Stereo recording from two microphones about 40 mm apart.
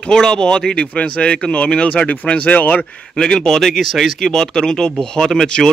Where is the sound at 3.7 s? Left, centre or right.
Centre.